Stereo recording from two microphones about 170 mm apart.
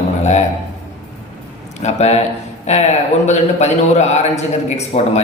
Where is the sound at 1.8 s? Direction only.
40° left (ahead or behind).